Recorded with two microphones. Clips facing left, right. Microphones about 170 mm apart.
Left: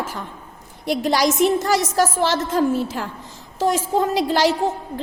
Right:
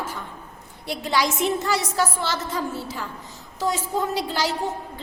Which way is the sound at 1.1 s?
40° left (ahead or behind).